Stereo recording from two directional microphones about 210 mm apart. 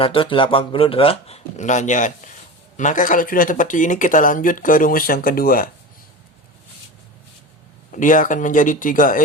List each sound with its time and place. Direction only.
0.0 s speech: 25° left (ahead or behind); by 5.6 s 45° left (ahead or behind)
7.9 s speech: 40° left (ahead or behind)